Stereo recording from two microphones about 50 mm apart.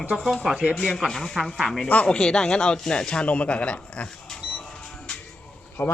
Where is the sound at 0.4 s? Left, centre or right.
Right.